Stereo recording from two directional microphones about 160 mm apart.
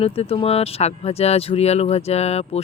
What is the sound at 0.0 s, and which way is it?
Speech, 35° left (ahead or behind).